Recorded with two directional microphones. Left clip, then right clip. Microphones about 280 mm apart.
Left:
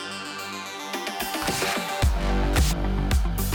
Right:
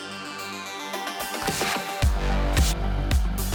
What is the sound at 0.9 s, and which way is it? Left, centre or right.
Music, centre.